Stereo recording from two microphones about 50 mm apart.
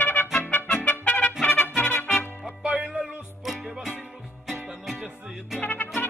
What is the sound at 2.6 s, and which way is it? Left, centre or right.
Music, right.